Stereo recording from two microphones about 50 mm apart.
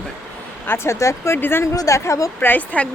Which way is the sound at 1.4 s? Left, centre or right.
Left.